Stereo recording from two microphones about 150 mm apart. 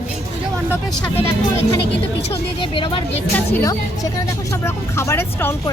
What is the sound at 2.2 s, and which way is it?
Speech, 35° left (ahead or behind).